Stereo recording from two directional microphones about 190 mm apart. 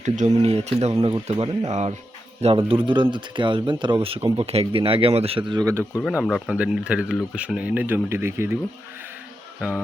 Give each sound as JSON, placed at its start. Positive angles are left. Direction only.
{"t": 0.0, "sound": "speech", "side_deg": -35}
{"t": 0.9, "sound": "speech", "side_deg": -15}
{"t": 1.4, "sound": "speech", "side_deg": -35}
{"t": 6.0, "sound": "speech", "side_deg": 0}